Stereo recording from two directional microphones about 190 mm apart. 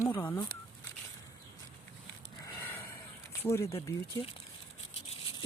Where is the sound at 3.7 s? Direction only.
15° left (ahead or behind).